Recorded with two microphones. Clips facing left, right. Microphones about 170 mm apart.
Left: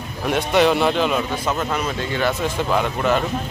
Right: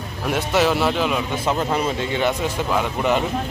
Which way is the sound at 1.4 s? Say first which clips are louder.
Right 2 dB; 25° right (ahead or behind).